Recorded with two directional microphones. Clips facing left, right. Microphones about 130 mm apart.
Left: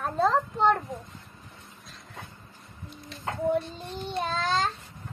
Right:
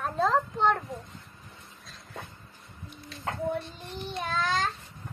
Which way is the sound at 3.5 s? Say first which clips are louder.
Left 6 dB; 35° left (ahead or behind).